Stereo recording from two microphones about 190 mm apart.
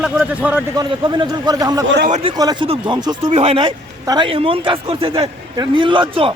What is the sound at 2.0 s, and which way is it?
Speech, 40° right (ahead or behind).